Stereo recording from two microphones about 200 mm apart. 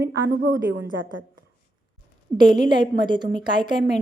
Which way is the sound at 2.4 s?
20° right (ahead or behind).